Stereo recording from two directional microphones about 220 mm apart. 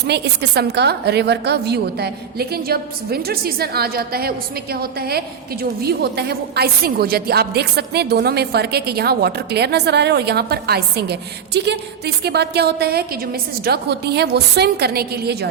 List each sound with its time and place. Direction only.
0.1 s a woman's voice: 50° right (ahead or behind)